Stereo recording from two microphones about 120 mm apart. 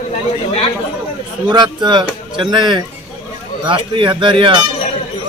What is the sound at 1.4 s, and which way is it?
Speech, 35° right (ahead or behind).